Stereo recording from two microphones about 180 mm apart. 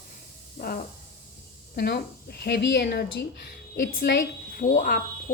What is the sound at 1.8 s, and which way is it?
A woman's voice, 60° left (ahead or behind).